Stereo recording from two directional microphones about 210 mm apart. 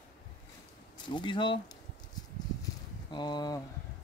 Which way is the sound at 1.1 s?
20° left (ahead or behind).